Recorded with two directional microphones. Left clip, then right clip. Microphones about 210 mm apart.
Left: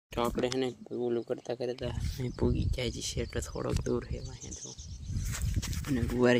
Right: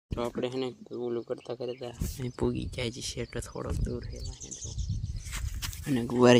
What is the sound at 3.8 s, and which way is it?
Speech, 35° left (ahead or behind).